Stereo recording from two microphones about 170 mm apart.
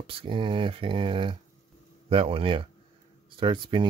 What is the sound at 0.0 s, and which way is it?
Speech, 30° right (ahead or behind).